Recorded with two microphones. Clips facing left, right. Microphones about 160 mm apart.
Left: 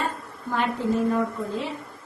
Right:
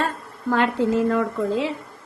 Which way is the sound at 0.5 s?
85° right.